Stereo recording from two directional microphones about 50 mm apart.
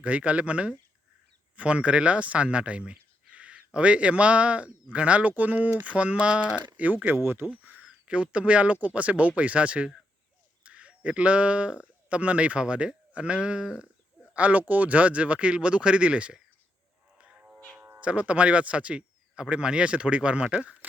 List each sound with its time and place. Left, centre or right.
0.0 s speech: right
7.6 s speech: right
17.2 s a sound: right
17.7 s cat: right
18.0 s speech: right